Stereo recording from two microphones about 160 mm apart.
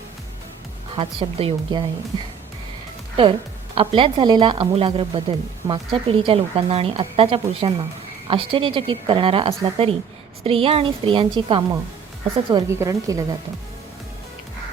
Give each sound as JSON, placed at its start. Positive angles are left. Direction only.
{"t": 0.9, "sound": "a woman's voice", "side_deg": -35}
{"t": 3.8, "sound": "a woman's voice", "side_deg": -30}
{"t": 12.5, "sound": "a woman's voice", "side_deg": -25}